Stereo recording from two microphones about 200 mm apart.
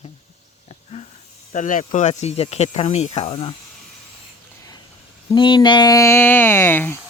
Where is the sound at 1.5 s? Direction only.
40° left (ahead or behind).